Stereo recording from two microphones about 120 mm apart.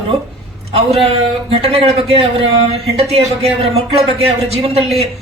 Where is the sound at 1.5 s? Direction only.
55° right (ahead or behind).